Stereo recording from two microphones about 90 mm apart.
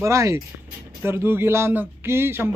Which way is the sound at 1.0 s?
25° right (ahead or behind).